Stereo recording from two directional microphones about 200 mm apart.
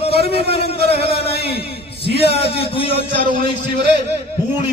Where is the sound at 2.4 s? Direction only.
30° left (ahead or behind).